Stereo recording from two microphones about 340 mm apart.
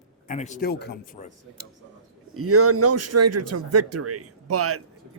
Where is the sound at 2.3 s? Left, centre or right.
Right.